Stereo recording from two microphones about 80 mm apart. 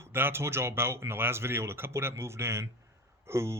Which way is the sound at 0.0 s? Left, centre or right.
Right.